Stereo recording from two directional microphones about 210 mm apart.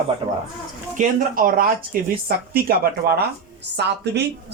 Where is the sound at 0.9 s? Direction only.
40° right (ahead or behind).